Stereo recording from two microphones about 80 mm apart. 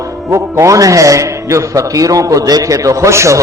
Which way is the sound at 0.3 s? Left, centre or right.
Right.